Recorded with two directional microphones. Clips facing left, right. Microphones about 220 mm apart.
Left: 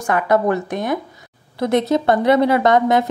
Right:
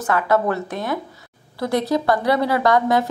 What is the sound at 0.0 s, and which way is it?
A woman's voice, 15° left (ahead or behind).